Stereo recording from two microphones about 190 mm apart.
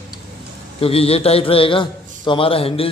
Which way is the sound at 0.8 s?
30° left (ahead or behind).